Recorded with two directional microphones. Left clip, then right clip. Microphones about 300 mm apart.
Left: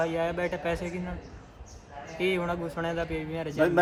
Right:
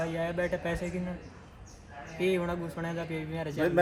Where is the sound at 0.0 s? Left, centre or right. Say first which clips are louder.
Left 3 dB; centre.